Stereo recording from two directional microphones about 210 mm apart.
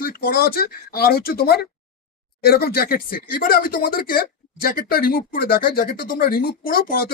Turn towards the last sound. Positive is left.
turn(degrees=45)  # may be behind; listen again after turning